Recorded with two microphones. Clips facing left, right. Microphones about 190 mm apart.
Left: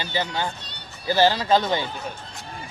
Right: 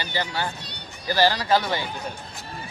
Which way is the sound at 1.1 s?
15° left (ahead or behind).